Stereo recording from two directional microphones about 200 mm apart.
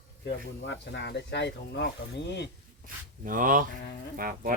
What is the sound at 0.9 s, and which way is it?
Speech, 60° left (ahead or behind).